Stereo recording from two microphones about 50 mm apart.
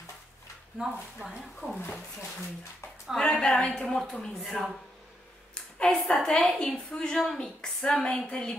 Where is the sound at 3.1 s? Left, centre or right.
Centre.